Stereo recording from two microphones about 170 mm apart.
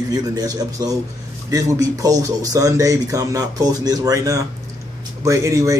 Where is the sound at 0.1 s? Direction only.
20° right (ahead or behind).